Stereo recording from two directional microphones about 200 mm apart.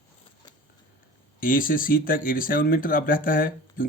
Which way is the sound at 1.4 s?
45° left (ahead or behind).